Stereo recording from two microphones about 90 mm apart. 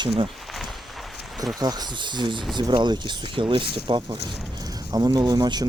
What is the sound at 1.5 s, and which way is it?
Speech, 50° right (ahead or behind).